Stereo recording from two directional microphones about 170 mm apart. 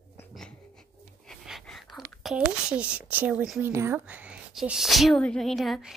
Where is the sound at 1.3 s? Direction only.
Centre (ahead or behind).